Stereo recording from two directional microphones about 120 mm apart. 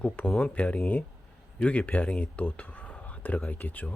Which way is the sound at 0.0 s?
5° left (ahead or behind).